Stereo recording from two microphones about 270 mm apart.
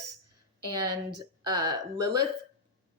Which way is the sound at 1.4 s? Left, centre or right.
Centre.